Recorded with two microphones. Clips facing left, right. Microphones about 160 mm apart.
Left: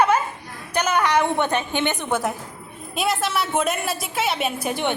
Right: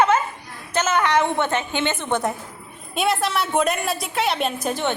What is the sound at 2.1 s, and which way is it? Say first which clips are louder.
A woman's voice: right 1 dB; centre (ahead or behind).